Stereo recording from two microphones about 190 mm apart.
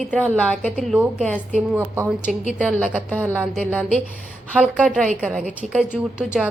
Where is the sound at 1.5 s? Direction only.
10° right (ahead or behind).